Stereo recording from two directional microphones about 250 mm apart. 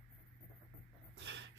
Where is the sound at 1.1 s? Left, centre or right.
Right.